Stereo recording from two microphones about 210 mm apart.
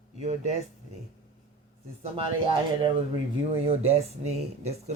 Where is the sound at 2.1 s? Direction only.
25° right (ahead or behind).